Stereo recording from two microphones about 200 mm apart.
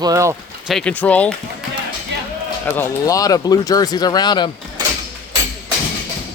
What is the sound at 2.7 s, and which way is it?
Speech, 15° left (ahead or behind).